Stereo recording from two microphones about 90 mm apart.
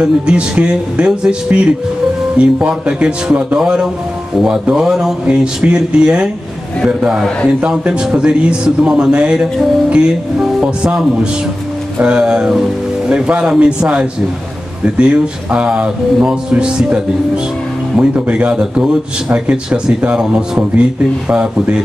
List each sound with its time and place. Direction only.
0.0 s speech: 10° right (ahead or behind)